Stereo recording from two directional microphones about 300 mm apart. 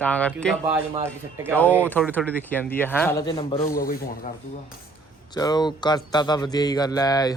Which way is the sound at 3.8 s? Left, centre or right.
Left.